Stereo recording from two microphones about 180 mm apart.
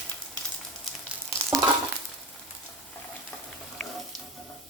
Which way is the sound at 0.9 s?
Centre (ahead or behind).